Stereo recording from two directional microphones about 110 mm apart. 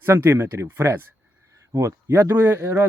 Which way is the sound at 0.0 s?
20° right (ahead or behind).